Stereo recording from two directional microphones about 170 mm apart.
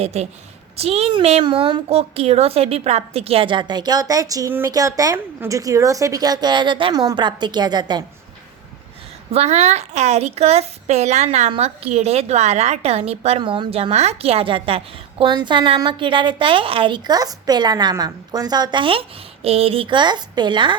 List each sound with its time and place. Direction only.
0.0 s a woman's voice: 40° right (ahead or behind)
9.3 s a woman's voice: 40° right (ahead or behind)